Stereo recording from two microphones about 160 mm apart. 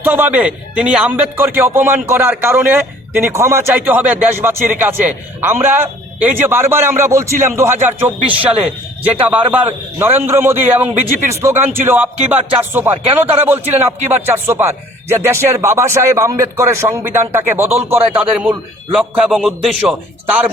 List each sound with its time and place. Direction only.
0.0 s a man's voice: 10° right (ahead or behind)